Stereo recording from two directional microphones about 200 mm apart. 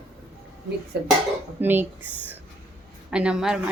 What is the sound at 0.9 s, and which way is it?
Speech, 55° right (ahead or behind).